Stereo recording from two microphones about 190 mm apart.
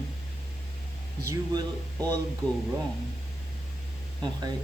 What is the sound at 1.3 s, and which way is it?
Speech, 20° right (ahead or behind).